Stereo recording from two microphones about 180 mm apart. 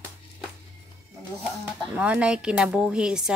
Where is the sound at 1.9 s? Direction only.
5° right (ahead or behind).